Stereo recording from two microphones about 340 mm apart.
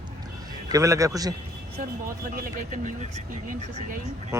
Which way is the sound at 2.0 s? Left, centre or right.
Right.